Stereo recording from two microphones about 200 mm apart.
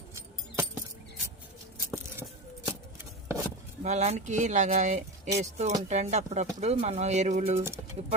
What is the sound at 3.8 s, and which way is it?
Speech, 35° right (ahead or behind).